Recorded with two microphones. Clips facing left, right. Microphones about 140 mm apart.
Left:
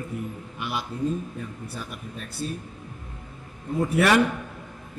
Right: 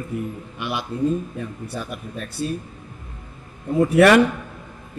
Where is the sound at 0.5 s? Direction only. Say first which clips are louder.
Right 4 dB; 75° right (ahead or behind).